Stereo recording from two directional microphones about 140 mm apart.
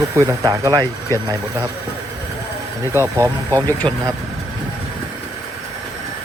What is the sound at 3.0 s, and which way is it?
Speech, 25° right (ahead or behind).